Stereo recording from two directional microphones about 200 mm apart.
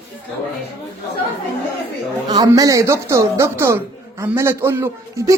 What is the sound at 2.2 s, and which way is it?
A man's voice, 20° right (ahead or behind).